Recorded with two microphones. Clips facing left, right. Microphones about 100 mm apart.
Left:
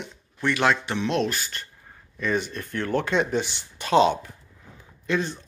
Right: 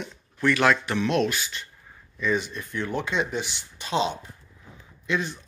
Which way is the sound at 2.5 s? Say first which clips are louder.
Left 3 dB; 55° left (ahead or behind).